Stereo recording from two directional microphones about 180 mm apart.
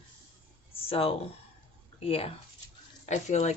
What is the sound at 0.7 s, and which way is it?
Speech, 30° left (ahead or behind).